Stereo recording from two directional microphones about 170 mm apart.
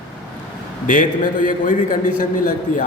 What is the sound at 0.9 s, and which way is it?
A man's voice, 50° left (ahead or behind).